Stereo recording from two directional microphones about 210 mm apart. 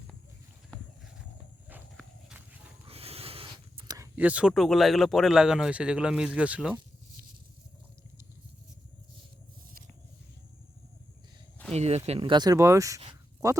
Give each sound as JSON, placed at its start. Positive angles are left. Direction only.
{"t": 2.0, "sound": "horse", "side_deg": -5}
{"t": 2.8, "sound": "speech", "side_deg": -30}
{"t": 11.7, "sound": "speech", "side_deg": -30}